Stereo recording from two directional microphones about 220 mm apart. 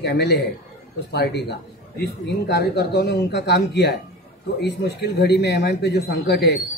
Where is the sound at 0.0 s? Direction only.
50° left (ahead or behind).